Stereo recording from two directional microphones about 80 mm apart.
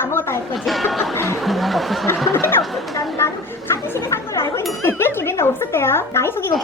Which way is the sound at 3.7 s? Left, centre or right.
Left.